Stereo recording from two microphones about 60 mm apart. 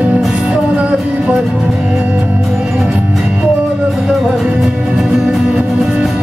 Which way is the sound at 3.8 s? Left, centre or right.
Centre.